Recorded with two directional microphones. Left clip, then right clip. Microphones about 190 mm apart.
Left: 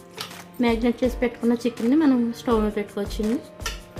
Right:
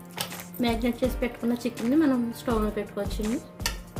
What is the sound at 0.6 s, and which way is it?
A woman's voice, 45° left (ahead or behind).